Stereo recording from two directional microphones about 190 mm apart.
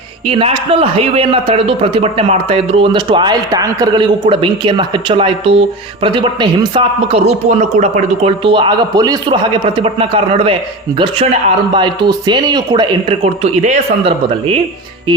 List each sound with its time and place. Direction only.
0.3 s a man's voice: 30° right (ahead or behind)